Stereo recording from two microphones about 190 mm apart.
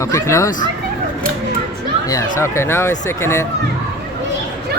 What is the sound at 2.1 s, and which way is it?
Speech, 15° left (ahead or behind).